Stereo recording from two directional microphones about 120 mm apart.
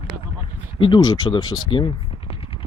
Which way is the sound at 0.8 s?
35° left (ahead or behind).